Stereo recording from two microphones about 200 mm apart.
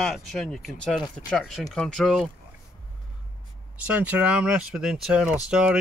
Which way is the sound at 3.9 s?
5° right (ahead or behind).